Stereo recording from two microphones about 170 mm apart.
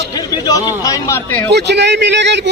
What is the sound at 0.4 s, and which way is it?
Speech, 20° left (ahead or behind).